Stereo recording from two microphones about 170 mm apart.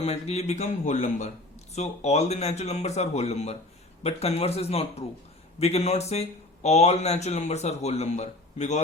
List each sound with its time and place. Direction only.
0.0 s speech: 40° left (ahead or behind)